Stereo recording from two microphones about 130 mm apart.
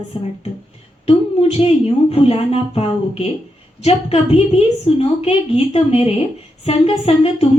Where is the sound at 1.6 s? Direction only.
45° left (ahead or behind).